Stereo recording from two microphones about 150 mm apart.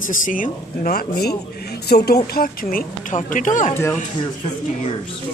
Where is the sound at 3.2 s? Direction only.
60° left (ahead or behind).